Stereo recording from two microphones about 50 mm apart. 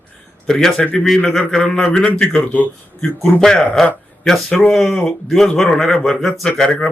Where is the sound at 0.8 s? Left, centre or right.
Left.